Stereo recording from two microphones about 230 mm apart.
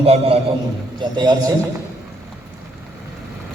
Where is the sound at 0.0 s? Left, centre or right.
Right.